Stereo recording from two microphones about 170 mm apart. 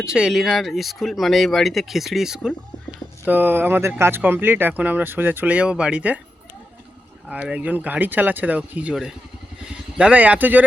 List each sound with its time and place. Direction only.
0.0 s speech: 5° right (ahead or behind)
7.3 s speech: 5° right (ahead or behind)